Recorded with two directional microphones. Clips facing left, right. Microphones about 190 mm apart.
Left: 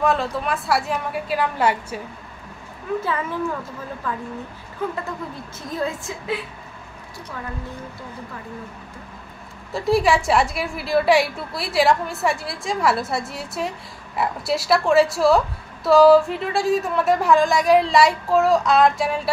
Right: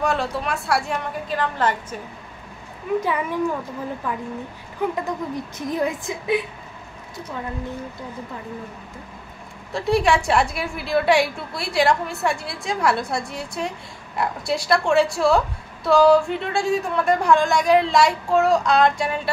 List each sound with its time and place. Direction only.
0.0 s a woman's voice: centre (ahead or behind)
3.0 s speech: 15° right (ahead or behind)
9.7 s a woman's voice: centre (ahead or behind)